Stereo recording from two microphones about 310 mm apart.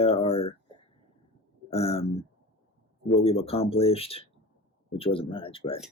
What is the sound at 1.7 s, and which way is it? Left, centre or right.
Speech, centre.